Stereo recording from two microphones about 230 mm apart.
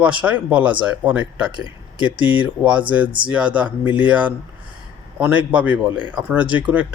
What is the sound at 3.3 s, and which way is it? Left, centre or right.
A man's voice, centre.